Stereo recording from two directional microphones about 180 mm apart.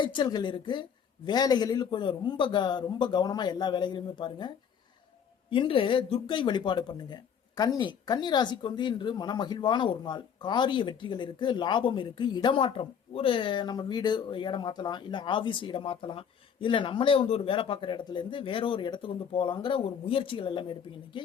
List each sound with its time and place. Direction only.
0.0 s speech: 25° left (ahead or behind)